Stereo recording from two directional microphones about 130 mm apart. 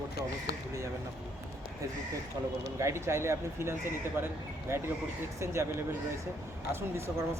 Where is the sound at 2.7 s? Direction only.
20° right (ahead or behind).